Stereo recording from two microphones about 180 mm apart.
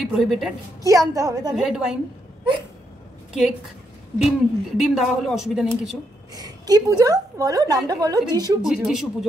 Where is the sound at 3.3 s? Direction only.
5° right (ahead or behind).